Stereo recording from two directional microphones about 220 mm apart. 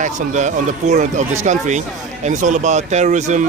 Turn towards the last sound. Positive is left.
turn(degrees=-35)  # may be behind; listen again after turning